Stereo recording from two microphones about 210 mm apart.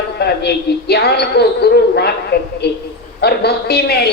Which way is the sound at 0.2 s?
50° left (ahead or behind).